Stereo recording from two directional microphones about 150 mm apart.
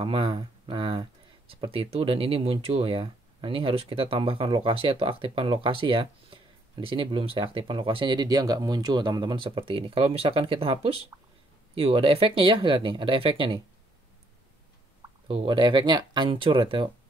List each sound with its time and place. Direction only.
0.0 s speech: 35° right (ahead or behind)
15.2 s speech: 35° right (ahead or behind)